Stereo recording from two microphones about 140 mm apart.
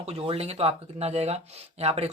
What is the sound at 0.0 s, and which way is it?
Speech, 45° right (ahead or behind).